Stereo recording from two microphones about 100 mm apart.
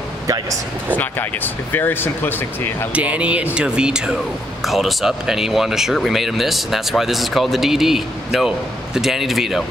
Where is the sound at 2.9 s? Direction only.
15° right (ahead or behind).